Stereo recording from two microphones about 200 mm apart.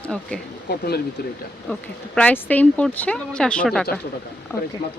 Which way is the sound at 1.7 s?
5° left (ahead or behind).